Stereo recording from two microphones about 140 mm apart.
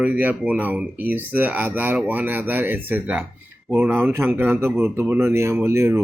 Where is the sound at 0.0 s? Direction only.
10° right (ahead or behind).